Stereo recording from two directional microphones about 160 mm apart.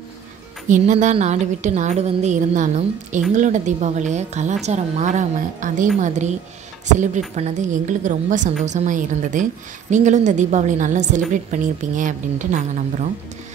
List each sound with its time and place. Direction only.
0.7 s a woman's voice: 50° right (ahead or behind)
7.3 s a woman's voice: 45° right (ahead or behind)